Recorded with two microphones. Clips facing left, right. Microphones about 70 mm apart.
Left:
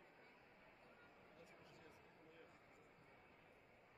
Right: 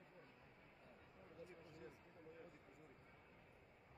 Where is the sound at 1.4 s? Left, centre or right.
Right.